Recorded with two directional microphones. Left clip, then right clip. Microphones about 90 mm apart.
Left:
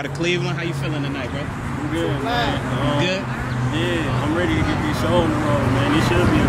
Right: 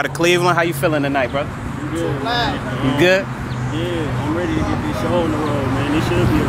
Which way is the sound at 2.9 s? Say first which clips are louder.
Right 10 dB; 35° right (ahead or behind).